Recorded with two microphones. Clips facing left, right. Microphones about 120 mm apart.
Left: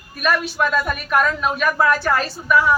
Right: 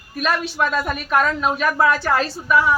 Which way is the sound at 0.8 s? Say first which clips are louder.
Even; 25° right (ahead or behind).